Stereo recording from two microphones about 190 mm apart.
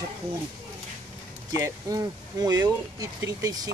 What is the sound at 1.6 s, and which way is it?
Speech, 20° right (ahead or behind).